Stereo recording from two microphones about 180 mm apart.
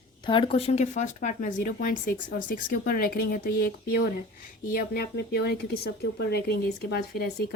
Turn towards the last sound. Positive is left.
turn(degrees=60)  # may be behind; listen again after turning